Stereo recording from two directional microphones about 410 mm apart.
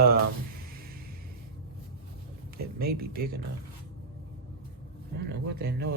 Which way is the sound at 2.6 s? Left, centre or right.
Right.